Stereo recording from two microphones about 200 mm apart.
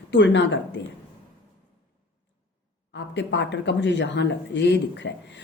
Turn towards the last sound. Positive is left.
turn(degrees=60)  # may be behind; listen again after turning